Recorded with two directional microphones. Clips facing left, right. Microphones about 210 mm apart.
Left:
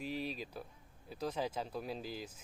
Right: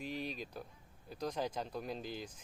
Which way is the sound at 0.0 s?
5° left (ahead or behind).